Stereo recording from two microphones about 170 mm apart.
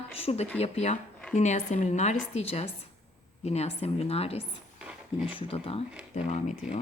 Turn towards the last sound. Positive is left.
turn(degrees=45)  # may be behind; listen again after turning